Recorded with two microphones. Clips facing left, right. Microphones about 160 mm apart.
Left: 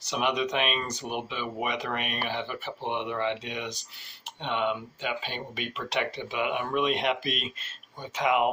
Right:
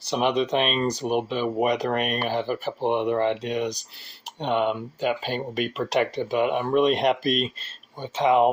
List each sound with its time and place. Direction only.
0.0 s speech: 30° right (ahead or behind)